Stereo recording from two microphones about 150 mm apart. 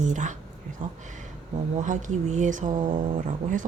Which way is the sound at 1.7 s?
55° right (ahead or behind).